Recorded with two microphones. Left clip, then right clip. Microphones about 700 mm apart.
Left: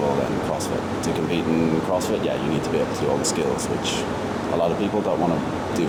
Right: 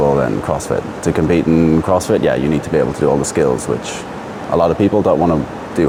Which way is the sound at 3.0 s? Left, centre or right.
Right.